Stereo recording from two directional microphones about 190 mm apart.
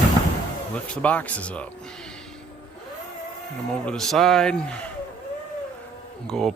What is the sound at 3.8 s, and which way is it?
Speech, centre (ahead or behind).